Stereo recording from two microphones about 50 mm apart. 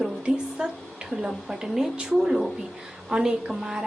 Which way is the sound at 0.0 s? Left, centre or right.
Centre.